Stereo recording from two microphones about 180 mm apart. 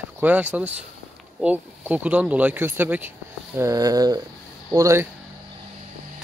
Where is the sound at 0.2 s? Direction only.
10° right (ahead or behind).